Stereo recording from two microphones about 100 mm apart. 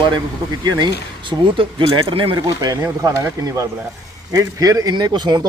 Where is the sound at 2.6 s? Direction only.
40° right (ahead or behind).